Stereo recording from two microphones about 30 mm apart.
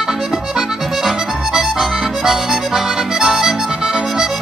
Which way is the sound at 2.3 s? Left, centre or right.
Centre.